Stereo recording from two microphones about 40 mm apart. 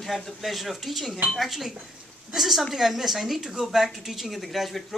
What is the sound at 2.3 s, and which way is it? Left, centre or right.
Speech, centre.